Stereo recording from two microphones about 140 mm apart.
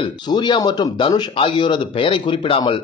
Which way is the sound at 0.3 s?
30° left (ahead or behind).